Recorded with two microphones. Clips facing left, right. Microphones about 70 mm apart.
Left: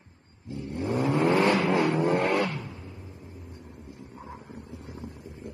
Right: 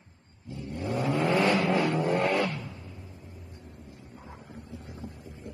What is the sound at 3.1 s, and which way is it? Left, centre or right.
Vehicle, left.